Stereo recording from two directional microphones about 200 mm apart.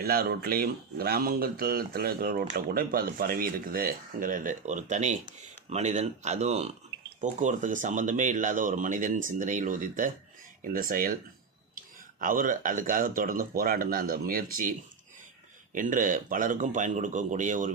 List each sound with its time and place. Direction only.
0.0 s speech: 50° right (ahead or behind)
12.2 s speech: 45° right (ahead or behind)